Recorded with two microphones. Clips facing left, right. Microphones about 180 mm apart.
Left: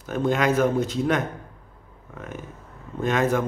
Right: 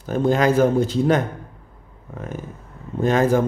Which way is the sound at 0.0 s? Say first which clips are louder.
Right 4 dB; 30° right (ahead or behind).